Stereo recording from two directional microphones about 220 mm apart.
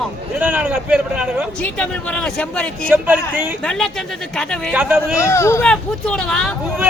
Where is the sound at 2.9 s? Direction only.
10° right (ahead or behind).